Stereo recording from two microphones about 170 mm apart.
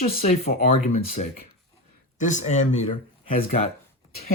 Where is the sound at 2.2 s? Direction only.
45° left (ahead or behind).